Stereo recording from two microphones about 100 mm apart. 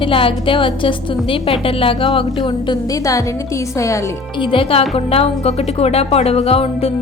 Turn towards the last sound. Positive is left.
turn(degrees=80)